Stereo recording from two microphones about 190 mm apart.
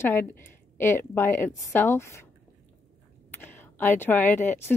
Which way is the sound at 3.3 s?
10° left (ahead or behind).